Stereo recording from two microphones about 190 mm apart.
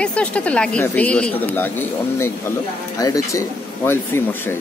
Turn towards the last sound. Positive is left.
turn(degrees=10)  # may be behind; listen again after turning